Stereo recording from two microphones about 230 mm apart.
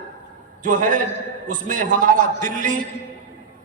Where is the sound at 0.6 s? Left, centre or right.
Right.